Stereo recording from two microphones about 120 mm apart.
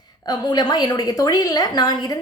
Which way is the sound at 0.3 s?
35° left (ahead or behind).